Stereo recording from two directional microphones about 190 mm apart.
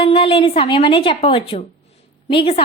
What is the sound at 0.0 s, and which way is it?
A woman's voice, 30° left (ahead or behind).